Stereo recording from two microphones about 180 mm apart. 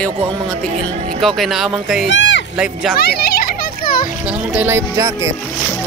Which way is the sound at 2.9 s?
60° left (ahead or behind).